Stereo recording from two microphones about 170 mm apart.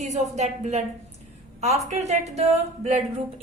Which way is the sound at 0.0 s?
40° right (ahead or behind).